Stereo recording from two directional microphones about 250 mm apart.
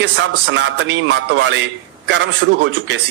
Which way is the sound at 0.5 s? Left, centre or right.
Right.